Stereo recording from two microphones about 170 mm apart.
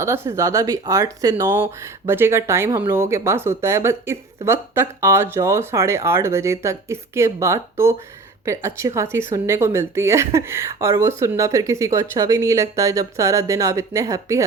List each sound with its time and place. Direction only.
0.0 s speech: 15° right (ahead or behind)